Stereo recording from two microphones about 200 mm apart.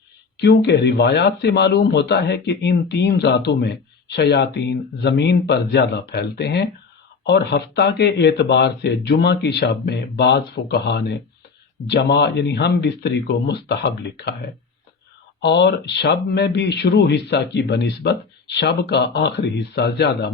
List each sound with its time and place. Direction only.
0.3 s speech: 55° left (ahead or behind)